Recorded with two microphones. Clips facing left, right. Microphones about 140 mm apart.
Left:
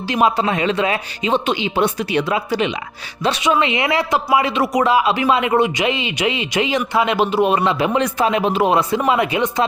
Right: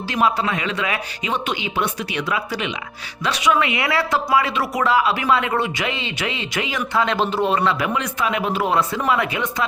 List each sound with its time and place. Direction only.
0.1 s speech: 20° left (ahead or behind)
7.0 s speech: 10° left (ahead or behind)